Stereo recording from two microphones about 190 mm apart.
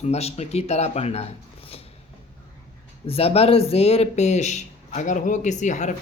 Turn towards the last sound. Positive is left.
turn(degrees=40)  # may be behind; listen again after turning